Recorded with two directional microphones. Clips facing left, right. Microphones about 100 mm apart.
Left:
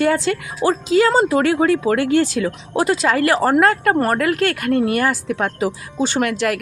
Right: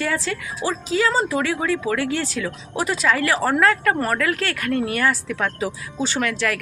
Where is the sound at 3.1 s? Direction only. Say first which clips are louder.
Left 2 dB; 45° left (ahead or behind).